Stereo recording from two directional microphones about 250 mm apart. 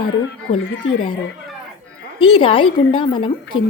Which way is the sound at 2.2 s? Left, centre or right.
Left.